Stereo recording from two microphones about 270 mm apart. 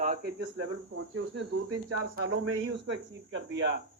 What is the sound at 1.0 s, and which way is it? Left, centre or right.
Speech, right.